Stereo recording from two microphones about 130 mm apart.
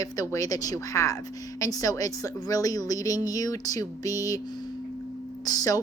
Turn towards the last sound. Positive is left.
turn(degrees=30)  # may be behind; listen again after turning